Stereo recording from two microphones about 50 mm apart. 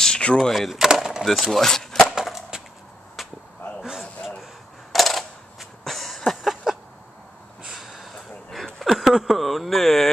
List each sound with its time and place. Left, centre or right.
0.0 s a sound: centre
0.4 s speech: centre
1.2 s speech: centre
2.0 s skateboard: centre
3.2 s chop: centre
4.9 s coin: centre
7.7 s a sound: centre